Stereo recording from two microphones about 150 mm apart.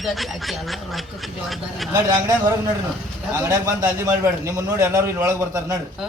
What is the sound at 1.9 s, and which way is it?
Speech, 25° right (ahead or behind).